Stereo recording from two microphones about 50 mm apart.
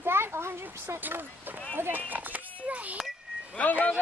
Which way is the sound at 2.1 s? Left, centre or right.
Right.